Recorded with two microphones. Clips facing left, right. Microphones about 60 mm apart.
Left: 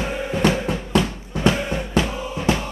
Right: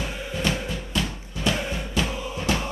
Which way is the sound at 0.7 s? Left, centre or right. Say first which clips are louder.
Left 8 dB; left.